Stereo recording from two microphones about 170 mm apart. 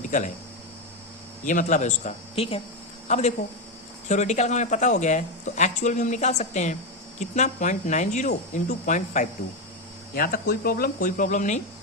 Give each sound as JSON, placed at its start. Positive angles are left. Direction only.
{"t": 1.5, "sound": "speech", "side_deg": 45}
{"t": 10.2, "sound": "speech", "side_deg": 60}